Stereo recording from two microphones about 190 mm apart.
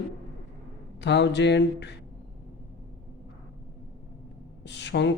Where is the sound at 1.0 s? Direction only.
65° left (ahead or behind).